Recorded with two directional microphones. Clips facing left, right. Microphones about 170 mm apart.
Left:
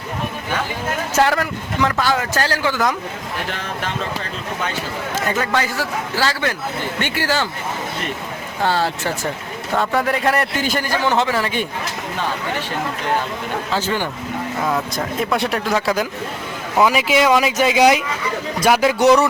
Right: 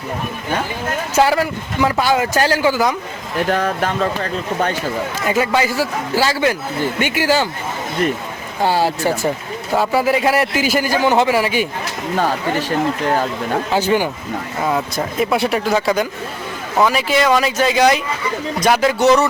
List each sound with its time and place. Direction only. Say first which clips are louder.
1.1 s a man's voice: right 3 dB; 5° right (ahead or behind)
3.5 s speech: right 8 dB; 45° right (ahead or behind)
5.3 s a man's voice: right 5 dB; 10° right (ahead or behind)
8.6 s a man's voice: right 4 dB; 10° right (ahead or behind)
13.7 s a man's voice: right 5 dB; 15° right (ahead or behind)
16.7 s speech: even; 10° left (ahead or behind)